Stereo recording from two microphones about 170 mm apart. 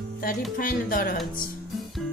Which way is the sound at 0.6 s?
55° left (ahead or behind).